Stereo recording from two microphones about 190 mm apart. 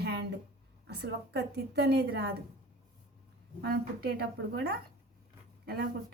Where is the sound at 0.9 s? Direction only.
65° right (ahead or behind).